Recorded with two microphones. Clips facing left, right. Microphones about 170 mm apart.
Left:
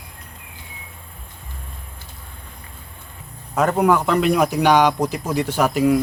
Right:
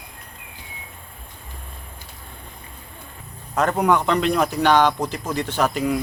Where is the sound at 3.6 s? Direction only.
5° left (ahead or behind).